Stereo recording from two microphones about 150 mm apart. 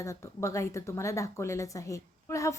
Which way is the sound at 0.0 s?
20° left (ahead or behind).